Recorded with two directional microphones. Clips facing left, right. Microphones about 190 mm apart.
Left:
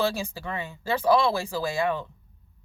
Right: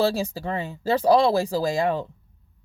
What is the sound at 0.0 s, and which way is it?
Speech, 35° right (ahead or behind).